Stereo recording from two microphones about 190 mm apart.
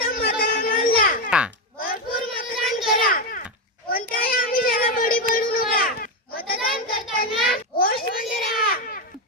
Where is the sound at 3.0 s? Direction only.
50° left (ahead or behind).